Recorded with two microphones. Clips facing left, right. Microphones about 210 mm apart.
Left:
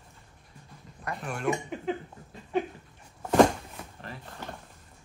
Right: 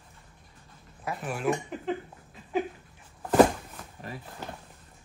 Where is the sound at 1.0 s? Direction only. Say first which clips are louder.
Right 1 dB; 5° right (ahead or behind).